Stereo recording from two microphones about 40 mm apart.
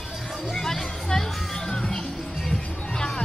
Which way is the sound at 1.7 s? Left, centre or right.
Left.